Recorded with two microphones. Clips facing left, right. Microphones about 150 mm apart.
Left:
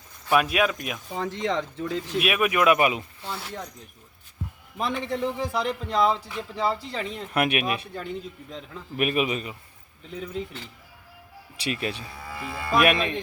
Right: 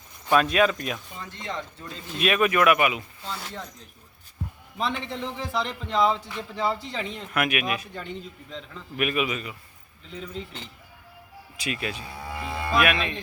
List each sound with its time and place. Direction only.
0.3 s a man's voice: 10° left (ahead or behind)
1.1 s speech: 90° left
2.1 s a man's voice: 10° left (ahead or behind)
2.6 s a man's voice: 35° left (ahead or behind)
4.8 s a man's voice: 10° left (ahead or behind)
7.3 s a man's voice: 30° left (ahead or behind)
8.1 s speech: 5° left (ahead or behind)
9.0 s a man's voice: 35° left (ahead or behind)
10.1 s a man's voice: 10° left (ahead or behind)
11.5 s a man's voice: 35° left (ahead or behind)
12.3 s speech: 15° right (ahead or behind)
12.8 s a man's voice: 40° left (ahead or behind)